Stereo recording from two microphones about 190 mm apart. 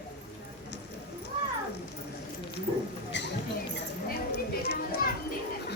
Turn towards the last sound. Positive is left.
turn(degrees=60)  # may be behind; listen again after turning